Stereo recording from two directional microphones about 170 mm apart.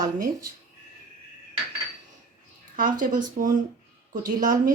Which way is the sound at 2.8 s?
50° right (ahead or behind).